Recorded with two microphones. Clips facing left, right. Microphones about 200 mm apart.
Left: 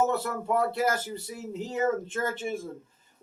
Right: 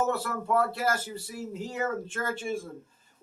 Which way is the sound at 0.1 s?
20° left (ahead or behind).